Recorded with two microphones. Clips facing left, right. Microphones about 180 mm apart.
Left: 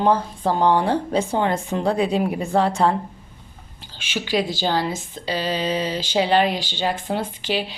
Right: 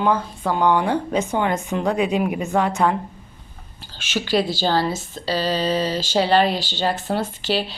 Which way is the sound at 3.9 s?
10° left (ahead or behind).